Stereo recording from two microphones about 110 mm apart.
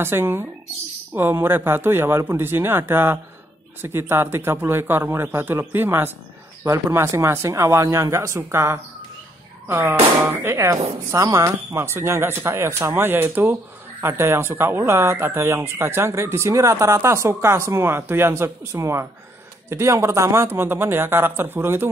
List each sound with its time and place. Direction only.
0.0 s speech: 20° right (ahead or behind)